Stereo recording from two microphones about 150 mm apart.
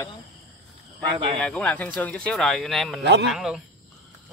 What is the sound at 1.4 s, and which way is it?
Speech, 5° left (ahead or behind).